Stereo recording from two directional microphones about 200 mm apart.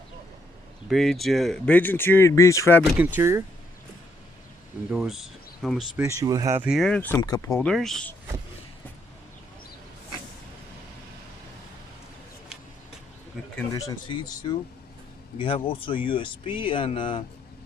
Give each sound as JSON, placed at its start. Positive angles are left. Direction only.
{"t": 0.8, "sound": "speech", "side_deg": 0}
{"t": 3.0, "sound": "speech", "side_deg": -10}
{"t": 4.9, "sound": "speech", "side_deg": 0}
{"t": 6.1, "sound": "speech", "side_deg": -15}
{"t": 7.2, "sound": "speech", "side_deg": 20}
{"t": 7.6, "sound": "speech", "side_deg": 0}
{"t": 13.7, "sound": "speech", "side_deg": 15}